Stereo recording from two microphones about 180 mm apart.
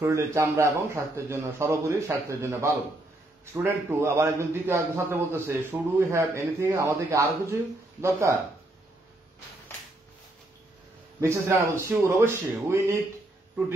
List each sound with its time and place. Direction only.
0.0 s a man's voice: 15° right (ahead or behind)
11.1 s a man's voice: 15° right (ahead or behind)